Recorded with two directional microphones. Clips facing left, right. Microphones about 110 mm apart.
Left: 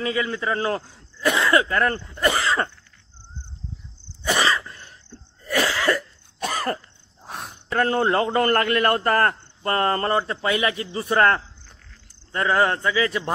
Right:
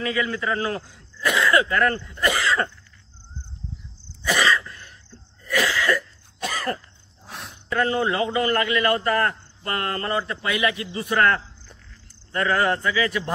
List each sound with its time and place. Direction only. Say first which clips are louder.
0.0 s a man's voice: even; 25° left (ahead or behind)
4.3 s cough: even; 35° left (ahead or behind)
5.4 s cough: left 1 dB; 40° left (ahead or behind)
7.7 s a man's voice: left 2 dB; 45° left (ahead or behind)
12.3 s a man's voice: left 1 dB; 20° left (ahead or behind)